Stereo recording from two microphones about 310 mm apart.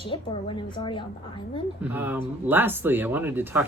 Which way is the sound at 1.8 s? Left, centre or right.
Centre.